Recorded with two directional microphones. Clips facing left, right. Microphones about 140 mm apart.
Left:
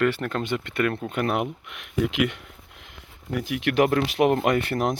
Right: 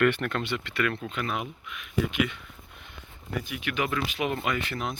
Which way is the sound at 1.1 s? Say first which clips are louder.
Left 7 dB; 60° left (ahead or behind).